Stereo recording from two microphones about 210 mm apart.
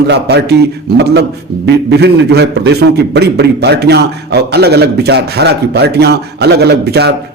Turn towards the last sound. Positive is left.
turn(degrees=-50)  # may be behind; listen again after turning